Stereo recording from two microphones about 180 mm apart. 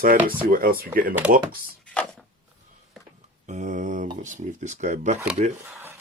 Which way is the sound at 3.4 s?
45° right (ahead or behind).